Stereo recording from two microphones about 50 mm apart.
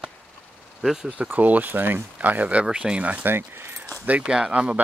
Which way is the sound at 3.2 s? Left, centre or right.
Right.